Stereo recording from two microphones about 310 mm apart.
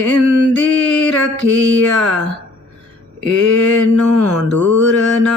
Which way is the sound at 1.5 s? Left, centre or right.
Right.